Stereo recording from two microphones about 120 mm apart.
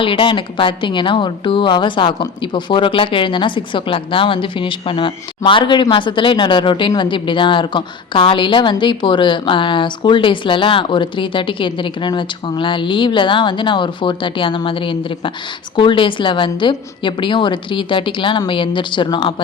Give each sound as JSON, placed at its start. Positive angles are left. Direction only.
{"t": 0.0, "sound": "a woman's voice", "side_deg": 45}